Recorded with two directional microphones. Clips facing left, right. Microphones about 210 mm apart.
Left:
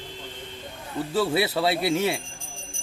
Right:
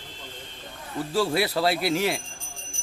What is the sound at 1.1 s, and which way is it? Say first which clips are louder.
Speech: even; centre (ahead or behind).